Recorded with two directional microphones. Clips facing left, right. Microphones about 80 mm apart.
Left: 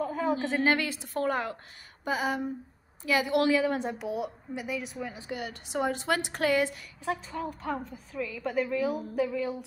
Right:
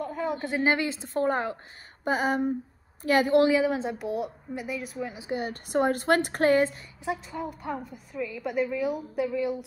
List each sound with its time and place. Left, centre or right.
0.0 s a sound: centre
0.7 s a woman's voice: right
2.0 s a sound: right
3.0 s a woman's voice: right
3.3 s a woman's voice: right
3.8 s a woman's voice: centre
4.9 s a woman's voice: centre
5.4 s a woman's voice: right
7.1 s a woman's voice: centre